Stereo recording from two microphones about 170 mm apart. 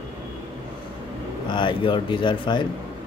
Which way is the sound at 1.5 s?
30° left (ahead or behind).